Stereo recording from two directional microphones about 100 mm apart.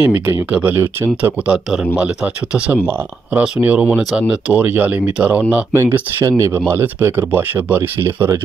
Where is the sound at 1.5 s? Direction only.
5° right (ahead or behind).